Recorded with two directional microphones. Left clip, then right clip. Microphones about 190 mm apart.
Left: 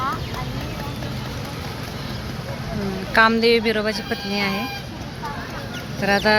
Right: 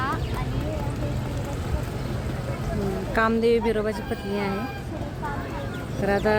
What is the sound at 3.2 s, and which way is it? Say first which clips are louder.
Speech: left 6 dB; 5° right (ahead or behind).